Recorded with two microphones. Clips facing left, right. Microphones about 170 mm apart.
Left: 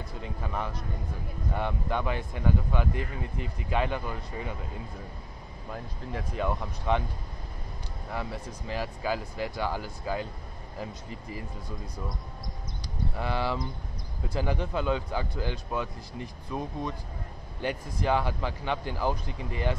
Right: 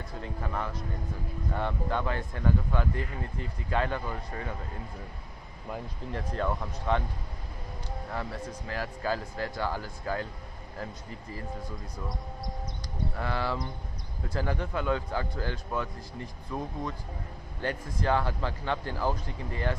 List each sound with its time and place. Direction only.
0.2 s speech: 15° left (ahead or behind)
6.1 s speech: 10° left (ahead or behind)
8.1 s speech: 15° left (ahead or behind)
13.2 s speech: 20° left (ahead or behind)